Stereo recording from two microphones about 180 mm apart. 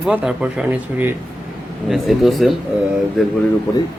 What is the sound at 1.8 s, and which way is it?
Speech, centre (ahead or behind).